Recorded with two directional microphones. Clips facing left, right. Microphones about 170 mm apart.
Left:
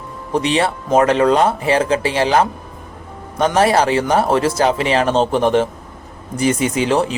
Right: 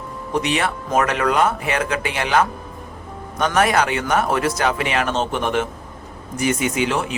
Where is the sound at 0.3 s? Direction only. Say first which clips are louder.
Left 4 dB; 30° left (ahead or behind).